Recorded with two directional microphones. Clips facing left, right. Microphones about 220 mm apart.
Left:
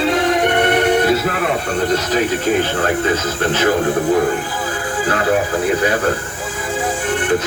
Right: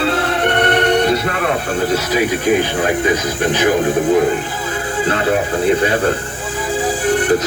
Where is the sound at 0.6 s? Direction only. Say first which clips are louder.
Right 2 dB; 10° left (ahead or behind).